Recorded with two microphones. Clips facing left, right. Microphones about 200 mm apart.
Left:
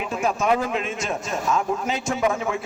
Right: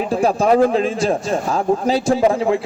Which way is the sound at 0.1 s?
35° right (ahead or behind).